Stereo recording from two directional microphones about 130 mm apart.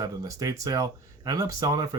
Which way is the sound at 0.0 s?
25° right (ahead or behind).